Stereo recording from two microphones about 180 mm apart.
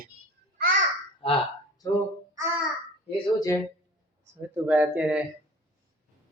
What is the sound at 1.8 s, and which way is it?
Speech, 20° left (ahead or behind).